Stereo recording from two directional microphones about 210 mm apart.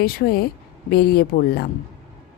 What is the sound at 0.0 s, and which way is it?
A woman's voice, 45° left (ahead or behind).